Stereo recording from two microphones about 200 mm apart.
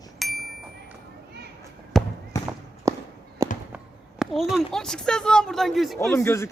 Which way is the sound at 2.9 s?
15° right (ahead or behind).